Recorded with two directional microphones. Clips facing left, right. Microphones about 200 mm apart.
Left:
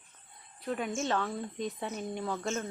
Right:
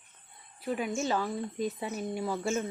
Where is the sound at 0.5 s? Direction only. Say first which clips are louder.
Right 2 dB; 5° right (ahead or behind).